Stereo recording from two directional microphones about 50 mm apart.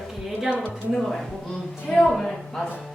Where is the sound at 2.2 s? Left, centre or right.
Centre.